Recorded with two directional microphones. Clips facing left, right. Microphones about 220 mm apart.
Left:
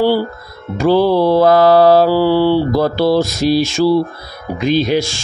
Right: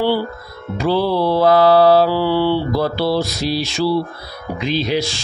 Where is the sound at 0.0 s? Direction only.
40° left (ahead or behind).